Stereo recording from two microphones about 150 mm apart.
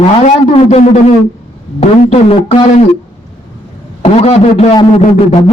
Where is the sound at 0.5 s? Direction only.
45° left (ahead or behind).